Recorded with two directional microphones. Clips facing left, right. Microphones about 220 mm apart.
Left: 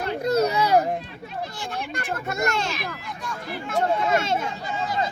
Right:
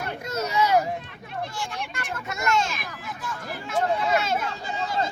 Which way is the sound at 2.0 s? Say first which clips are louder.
Left 2 dB; 55° left (ahead or behind).